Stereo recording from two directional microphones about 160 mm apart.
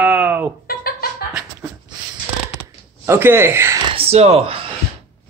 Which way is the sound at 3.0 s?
15° right (ahead or behind).